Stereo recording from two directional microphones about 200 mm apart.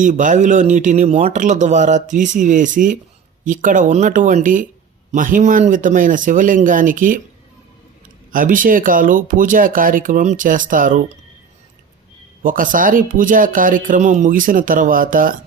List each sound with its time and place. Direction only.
0.0 s speech: 40° right (ahead or behind)
8.3 s speech: 45° right (ahead or behind)
12.4 s speech: 40° right (ahead or behind)